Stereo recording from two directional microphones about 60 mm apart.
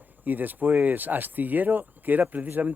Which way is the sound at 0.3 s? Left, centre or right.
Right.